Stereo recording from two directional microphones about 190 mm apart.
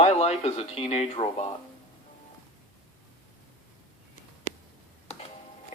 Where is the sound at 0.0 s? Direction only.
35° left (ahead or behind).